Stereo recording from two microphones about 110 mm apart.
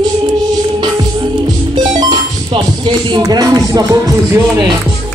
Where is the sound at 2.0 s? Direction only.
55° right (ahead or behind).